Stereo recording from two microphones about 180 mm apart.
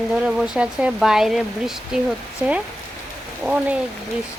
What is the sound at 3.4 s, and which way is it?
Speech, centre (ahead or behind).